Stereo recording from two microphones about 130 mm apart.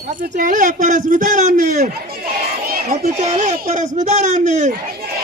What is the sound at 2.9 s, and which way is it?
Speech, 75° right (ahead or behind).